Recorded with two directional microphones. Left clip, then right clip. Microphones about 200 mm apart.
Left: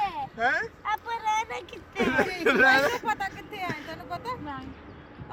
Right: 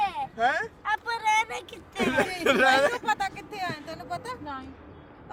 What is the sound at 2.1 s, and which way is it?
Speech, 40° right (ahead or behind).